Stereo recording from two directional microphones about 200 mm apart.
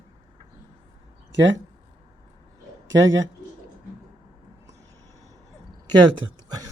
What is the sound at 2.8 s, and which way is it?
Speech, 70° right (ahead or behind).